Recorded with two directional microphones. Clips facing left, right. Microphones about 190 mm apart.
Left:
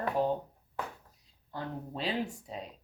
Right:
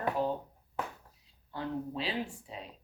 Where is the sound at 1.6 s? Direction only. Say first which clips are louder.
Right 2 dB; 40° left (ahead or behind).